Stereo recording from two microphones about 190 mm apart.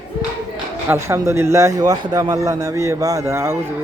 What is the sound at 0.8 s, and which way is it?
A man's voice, 15° right (ahead or behind).